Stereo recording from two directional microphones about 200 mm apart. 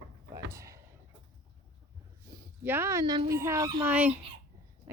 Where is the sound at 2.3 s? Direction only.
15° right (ahead or behind).